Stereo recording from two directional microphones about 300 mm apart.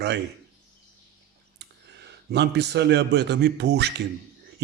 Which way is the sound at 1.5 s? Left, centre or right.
Right.